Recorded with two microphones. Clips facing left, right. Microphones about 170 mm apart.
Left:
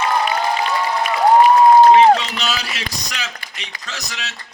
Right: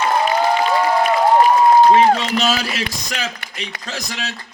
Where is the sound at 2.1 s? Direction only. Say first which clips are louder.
Right 5 dB; 40° right (ahead or behind).